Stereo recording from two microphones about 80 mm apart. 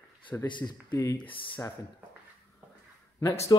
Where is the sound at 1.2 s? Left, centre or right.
Left.